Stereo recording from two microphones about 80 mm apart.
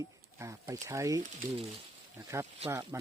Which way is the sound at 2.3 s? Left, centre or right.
Right.